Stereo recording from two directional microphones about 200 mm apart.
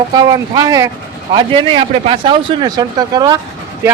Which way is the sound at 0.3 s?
20° right (ahead or behind).